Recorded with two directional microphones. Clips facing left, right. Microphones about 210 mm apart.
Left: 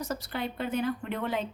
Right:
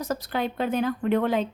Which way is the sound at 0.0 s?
90° right.